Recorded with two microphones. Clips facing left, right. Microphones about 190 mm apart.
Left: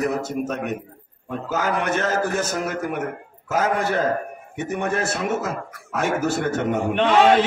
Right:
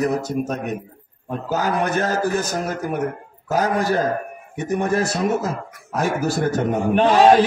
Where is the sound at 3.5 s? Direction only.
35° right (ahead or behind).